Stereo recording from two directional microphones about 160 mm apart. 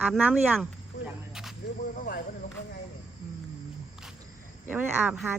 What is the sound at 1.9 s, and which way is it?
Speech, 65° left (ahead or behind).